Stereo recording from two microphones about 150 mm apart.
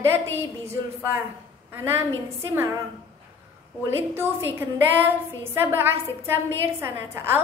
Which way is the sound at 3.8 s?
15° right (ahead or behind).